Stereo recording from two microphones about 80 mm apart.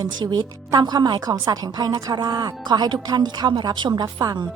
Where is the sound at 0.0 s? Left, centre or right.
Right.